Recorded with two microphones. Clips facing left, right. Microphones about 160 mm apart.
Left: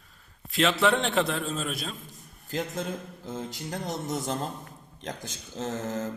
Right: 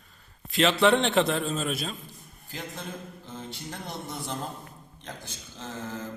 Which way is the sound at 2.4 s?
45° left (ahead or behind).